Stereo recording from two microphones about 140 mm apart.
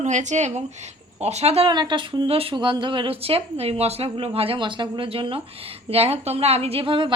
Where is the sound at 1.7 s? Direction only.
30° right (ahead or behind).